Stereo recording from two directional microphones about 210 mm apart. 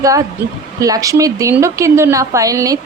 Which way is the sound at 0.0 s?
15° right (ahead or behind).